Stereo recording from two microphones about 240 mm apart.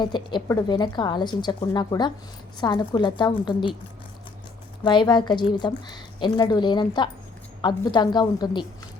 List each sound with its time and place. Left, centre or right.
0.0 s a woman's voice: centre
4.8 s a woman's voice: centre